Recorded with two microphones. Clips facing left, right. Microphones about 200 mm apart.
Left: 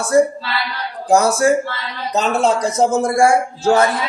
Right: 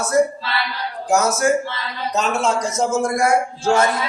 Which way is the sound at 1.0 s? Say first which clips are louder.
Left 4 dB; 35° left (ahead or behind).